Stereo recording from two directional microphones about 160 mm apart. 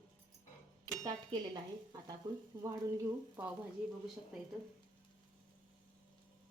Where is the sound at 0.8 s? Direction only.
25° right (ahead or behind).